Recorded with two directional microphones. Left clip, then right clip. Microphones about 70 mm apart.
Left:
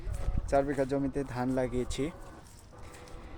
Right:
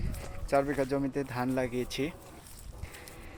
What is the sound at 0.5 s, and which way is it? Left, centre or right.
Speech, centre.